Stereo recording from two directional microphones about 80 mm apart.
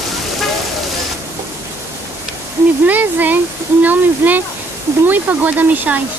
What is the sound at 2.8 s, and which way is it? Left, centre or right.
Speech, right.